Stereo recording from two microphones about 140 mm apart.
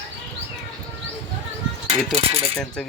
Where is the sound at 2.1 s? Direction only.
45° right (ahead or behind).